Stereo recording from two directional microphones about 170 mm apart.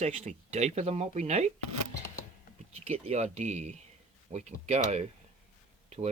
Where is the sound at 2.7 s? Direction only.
40° right (ahead or behind).